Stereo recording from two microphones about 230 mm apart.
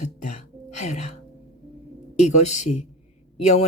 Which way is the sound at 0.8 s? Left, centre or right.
Left.